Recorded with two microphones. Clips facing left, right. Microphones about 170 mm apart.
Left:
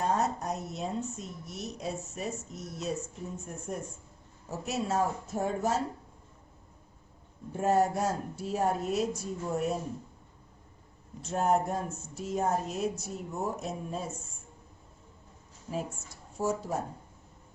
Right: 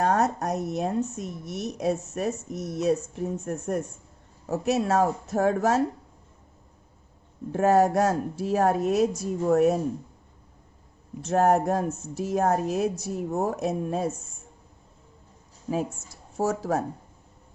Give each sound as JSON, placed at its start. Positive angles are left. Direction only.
{"t": 0.0, "sound": "a woman's voice", "side_deg": -75}
{"t": 7.5, "sound": "speech", "side_deg": -90}
{"t": 11.2, "sound": "speech", "side_deg": -75}
{"t": 16.4, "sound": "speech", "side_deg": -90}